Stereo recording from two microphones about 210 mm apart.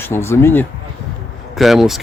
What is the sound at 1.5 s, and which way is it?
Speech, centre (ahead or behind).